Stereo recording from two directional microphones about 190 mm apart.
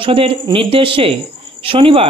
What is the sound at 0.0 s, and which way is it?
Speech, 30° right (ahead or behind).